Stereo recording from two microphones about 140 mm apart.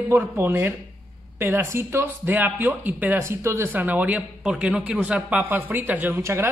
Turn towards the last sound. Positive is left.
turn(degrees=-15)  # may be behind; listen again after turning